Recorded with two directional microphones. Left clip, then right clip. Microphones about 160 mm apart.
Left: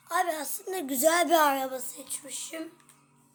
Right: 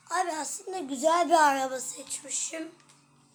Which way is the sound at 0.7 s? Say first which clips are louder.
Left 1 dB; 35° left (ahead or behind).